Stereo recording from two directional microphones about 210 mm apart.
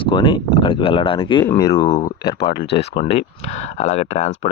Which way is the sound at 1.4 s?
15° left (ahead or behind).